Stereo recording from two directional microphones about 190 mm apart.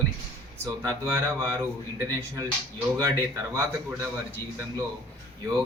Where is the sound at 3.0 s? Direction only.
15° right (ahead or behind).